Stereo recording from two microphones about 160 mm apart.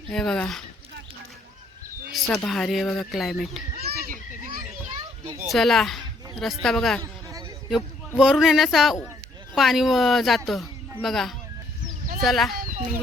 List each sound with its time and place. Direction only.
0.1 s speech: 5° left (ahead or behind)
2.2 s speech: centre (ahead or behind)
3.8 s children playing: 60° right (ahead or behind)
5.5 s speech: centre (ahead or behind)
7.0 s a sound: 20° right (ahead or behind)
7.7 s speech: 5° right (ahead or behind)